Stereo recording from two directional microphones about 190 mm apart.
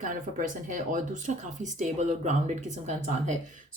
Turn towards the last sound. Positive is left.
turn(degrees=-40)  # may be behind; listen again after turning